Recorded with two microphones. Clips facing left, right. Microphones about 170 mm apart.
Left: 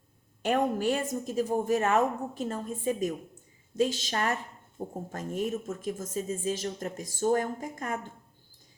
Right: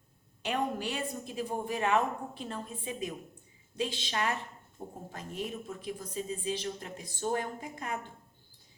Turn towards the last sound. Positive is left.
turn(degrees=45)  # may be behind; listen again after turning